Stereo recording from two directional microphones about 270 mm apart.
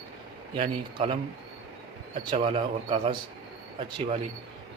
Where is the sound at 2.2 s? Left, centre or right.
Centre.